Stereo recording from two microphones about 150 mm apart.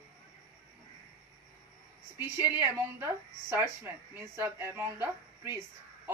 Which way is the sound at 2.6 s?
15° right (ahead or behind).